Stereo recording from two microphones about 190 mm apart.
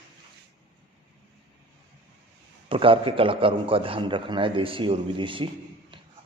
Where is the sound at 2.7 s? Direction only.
30° right (ahead or behind).